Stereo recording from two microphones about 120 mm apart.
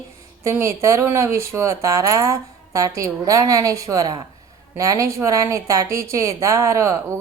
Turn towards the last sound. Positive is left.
turn(degrees=-25)  # may be behind; listen again after turning